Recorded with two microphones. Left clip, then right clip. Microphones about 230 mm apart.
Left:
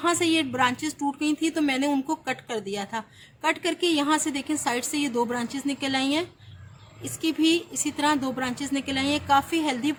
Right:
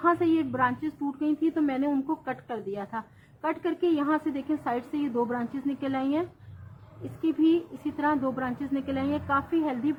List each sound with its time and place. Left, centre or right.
0.0 s a woman's voice: left
7.4 s a woman's voice: left